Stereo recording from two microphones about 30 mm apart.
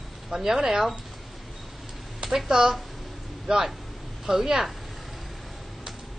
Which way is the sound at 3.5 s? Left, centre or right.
Right.